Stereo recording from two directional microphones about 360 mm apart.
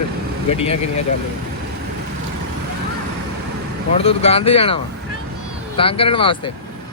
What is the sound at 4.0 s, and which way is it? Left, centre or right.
Speech, centre.